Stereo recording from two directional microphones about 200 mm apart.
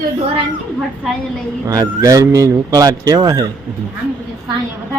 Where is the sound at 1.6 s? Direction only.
20° right (ahead or behind).